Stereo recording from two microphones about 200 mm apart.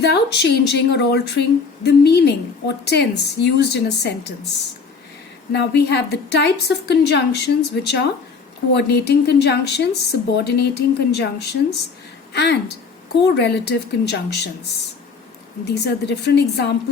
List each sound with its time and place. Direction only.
0.0 s a woman's voice: 60° left (ahead or behind)
5.5 s a woman's voice: 55° left (ahead or behind)
12.3 s a woman's voice: 55° left (ahead or behind)
15.6 s a woman's voice: 55° left (ahead or behind)